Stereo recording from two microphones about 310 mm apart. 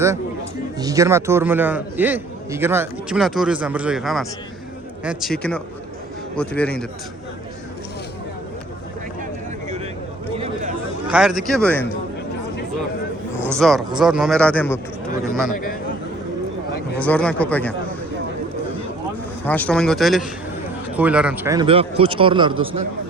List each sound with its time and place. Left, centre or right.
0.8 s a man's voice: centre
10.3 s chatter: centre
11.1 s a man's voice: centre
13.4 s a man's voice: centre
17.0 s a man's voice: centre
19.5 s a man's voice: centre